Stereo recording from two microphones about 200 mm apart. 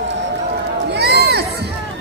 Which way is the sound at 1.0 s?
55° right (ahead or behind).